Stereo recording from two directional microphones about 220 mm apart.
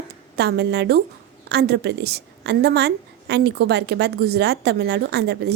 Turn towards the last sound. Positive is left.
turn(degrees=-50)  # may be behind; listen again after turning